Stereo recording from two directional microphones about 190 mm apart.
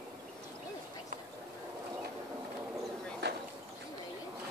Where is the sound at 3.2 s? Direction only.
65° right (ahead or behind).